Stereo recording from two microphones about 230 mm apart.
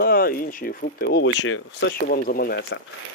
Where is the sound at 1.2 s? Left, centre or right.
Left.